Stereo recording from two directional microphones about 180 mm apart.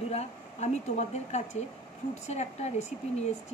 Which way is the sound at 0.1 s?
35° left (ahead or behind).